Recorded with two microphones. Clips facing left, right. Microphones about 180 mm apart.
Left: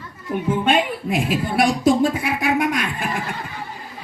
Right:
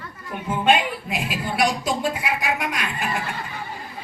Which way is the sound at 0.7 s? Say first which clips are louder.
Right 2 dB; 50° left (ahead or behind).